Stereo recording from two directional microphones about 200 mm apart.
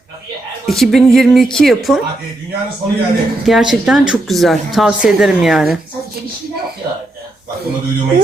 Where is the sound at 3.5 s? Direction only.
Centre (ahead or behind).